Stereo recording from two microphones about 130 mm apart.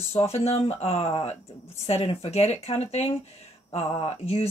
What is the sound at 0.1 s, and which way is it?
Speech, 50° left (ahead or behind).